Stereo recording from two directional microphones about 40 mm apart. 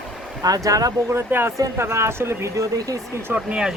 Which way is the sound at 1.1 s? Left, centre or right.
Right.